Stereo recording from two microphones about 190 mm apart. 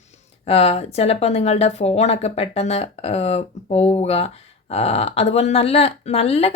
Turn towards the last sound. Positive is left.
turn(degrees=30)  # may be behind; listen again after turning